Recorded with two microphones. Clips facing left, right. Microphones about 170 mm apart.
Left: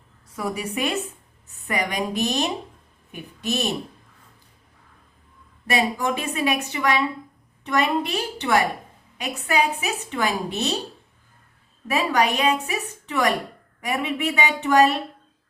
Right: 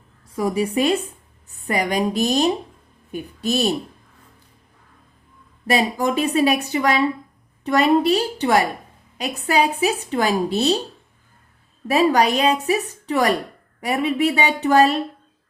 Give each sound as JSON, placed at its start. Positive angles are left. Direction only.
{"t": 0.3, "sound": "a woman's voice", "side_deg": -30}
{"t": 5.6, "sound": "a woman's voice", "side_deg": -35}
{"t": 11.9, "sound": "a woman's voice", "side_deg": -35}